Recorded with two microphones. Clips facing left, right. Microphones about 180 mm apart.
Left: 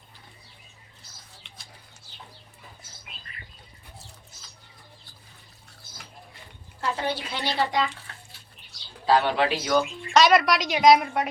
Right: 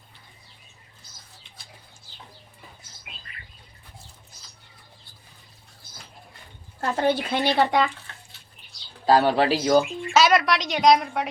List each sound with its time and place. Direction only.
6.8 s a woman's voice: 50° right (ahead or behind)
9.0 s speech: 40° right (ahead or behind)
10.1 s a woman's voice: centre (ahead or behind)